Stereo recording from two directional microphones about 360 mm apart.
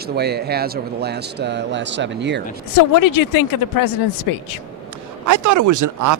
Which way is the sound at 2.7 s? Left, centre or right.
Left.